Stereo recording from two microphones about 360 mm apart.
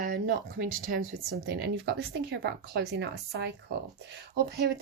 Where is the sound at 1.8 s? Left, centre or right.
Right.